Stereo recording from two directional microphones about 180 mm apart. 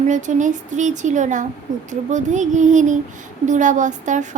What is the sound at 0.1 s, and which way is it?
A child's voice, 45° right (ahead or behind).